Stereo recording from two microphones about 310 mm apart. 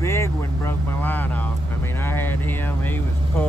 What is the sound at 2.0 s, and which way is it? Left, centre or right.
Music, centre.